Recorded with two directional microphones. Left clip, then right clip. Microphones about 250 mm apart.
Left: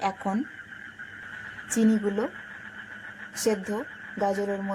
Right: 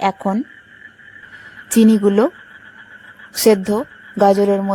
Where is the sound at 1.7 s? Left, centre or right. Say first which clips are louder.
Right 12 dB; right.